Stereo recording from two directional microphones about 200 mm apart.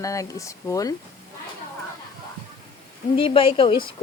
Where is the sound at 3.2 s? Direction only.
25° left (ahead or behind).